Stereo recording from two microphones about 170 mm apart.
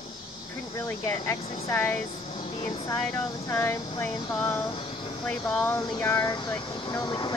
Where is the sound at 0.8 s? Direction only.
15° left (ahead or behind).